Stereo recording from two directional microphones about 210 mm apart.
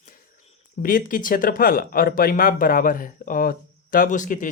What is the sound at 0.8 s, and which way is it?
Speech, 40° left (ahead or behind).